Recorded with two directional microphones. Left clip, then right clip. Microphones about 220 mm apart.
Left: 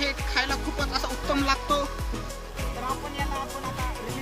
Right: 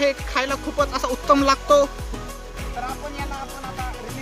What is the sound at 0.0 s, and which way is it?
Music, 45° right (ahead or behind).